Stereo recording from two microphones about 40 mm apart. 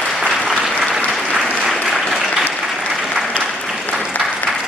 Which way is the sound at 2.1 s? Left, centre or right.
Centre.